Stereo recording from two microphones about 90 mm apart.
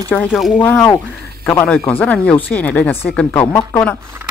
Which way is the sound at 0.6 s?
25° left (ahead or behind).